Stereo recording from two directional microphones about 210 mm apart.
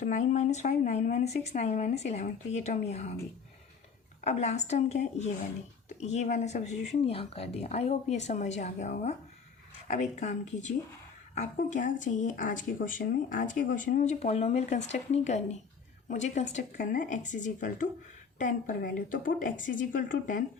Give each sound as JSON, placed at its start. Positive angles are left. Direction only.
{"t": 0.0, "sound": "speech", "side_deg": 35}
{"t": 4.2, "sound": "speech", "side_deg": 30}